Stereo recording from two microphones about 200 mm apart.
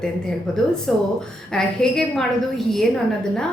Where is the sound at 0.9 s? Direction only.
5° left (ahead or behind).